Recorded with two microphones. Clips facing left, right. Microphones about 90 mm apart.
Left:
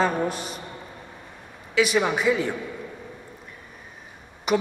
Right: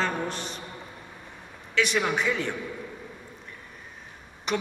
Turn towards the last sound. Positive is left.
turn(degrees=5)  # may be behind; listen again after turning